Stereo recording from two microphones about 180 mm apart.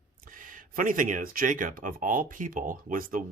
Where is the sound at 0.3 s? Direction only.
50° right (ahead or behind).